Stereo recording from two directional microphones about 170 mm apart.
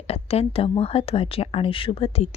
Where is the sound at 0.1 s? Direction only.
35° left (ahead or behind).